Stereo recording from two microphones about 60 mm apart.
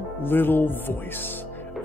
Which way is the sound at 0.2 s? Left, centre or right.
Left.